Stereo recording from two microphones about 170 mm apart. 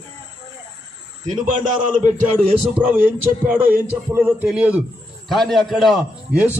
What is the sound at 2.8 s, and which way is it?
A man's voice, 10° right (ahead or behind).